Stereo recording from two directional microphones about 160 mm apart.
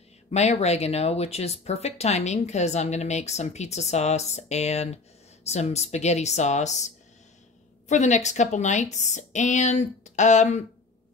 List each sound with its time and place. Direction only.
0.3 s speech: 45° left (ahead or behind)
7.9 s speech: 45° left (ahead or behind)